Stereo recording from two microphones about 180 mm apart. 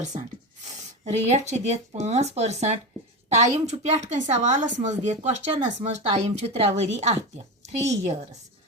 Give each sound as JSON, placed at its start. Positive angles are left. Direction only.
{"t": 1.0, "sound": "speech", "side_deg": -40}